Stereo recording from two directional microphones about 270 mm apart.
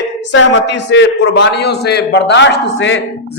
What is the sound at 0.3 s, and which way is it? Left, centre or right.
A man's voice, left.